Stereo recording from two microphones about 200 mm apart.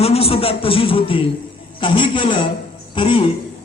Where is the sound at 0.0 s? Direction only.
30° left (ahead or behind).